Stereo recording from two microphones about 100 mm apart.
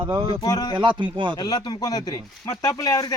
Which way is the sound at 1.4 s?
45° left (ahead or behind).